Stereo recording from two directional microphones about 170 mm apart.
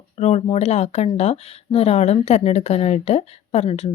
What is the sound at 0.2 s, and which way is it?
Speech, 40° left (ahead or behind).